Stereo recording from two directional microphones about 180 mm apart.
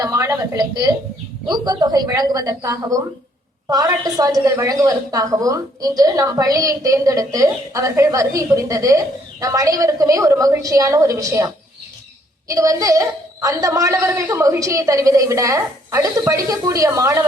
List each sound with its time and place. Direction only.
0.0 s a woman's voice: 20° right (ahead or behind)